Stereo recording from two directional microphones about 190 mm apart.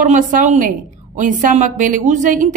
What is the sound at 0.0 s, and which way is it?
A woman's voice, 40° right (ahead or behind).